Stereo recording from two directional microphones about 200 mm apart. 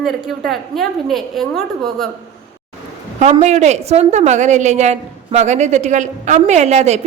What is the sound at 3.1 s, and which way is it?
A woman's voice, 35° right (ahead or behind).